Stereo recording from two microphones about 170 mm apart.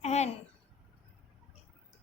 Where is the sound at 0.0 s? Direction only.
40° left (ahead or behind).